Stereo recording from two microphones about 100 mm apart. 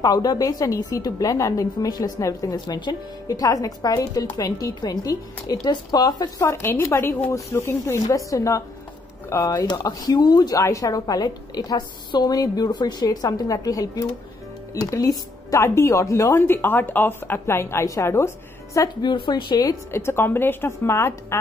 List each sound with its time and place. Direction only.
0.0 s speech: 40° left (ahead or behind)
2.6 s speech: 45° left (ahead or behind)
6.4 s speech: 25° left (ahead or behind)
19.0 s speech: 50° left (ahead or behind)
19.6 s speech: 35° left (ahead or behind)
20.0 s speech: 25° left (ahead or behind)